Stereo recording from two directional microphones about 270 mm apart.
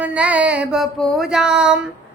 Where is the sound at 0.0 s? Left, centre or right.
Centre.